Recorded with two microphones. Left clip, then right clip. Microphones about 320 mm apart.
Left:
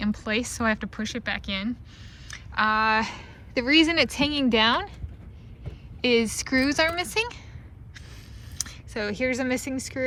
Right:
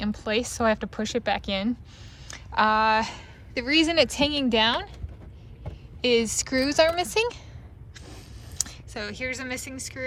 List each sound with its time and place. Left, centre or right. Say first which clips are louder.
0.0 s a woman's voice: right 1 dB; centre
6.0 s a woman's voice: even; centre
7.9 s a sound: right 1 dB; centre